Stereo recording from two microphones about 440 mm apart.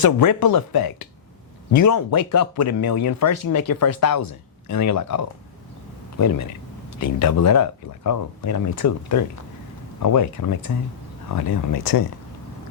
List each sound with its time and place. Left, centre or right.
0.0 s speech: left
1.7 s speech: left